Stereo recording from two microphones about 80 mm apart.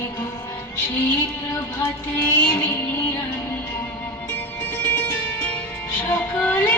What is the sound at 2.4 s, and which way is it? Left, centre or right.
Music, left.